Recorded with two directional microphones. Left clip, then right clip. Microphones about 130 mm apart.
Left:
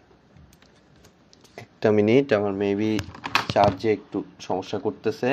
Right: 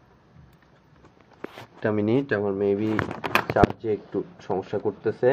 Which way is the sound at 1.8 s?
20° left (ahead or behind).